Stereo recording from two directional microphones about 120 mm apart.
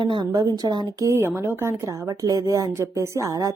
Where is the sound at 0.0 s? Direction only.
40° right (ahead or behind).